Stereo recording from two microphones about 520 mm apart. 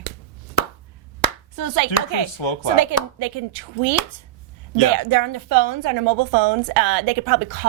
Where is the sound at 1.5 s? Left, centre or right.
Right.